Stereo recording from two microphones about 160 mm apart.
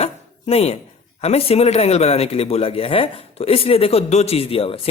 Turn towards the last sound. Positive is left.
turn(degrees=35)  # may be behind; listen again after turning